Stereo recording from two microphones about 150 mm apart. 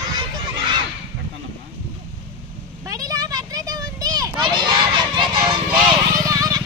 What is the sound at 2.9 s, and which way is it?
Children playing, 25° right (ahead or behind).